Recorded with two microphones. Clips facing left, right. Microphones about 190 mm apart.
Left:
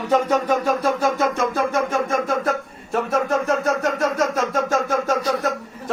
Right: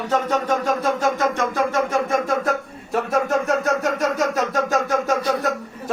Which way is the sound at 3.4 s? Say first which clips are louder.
Even; centre (ahead or behind).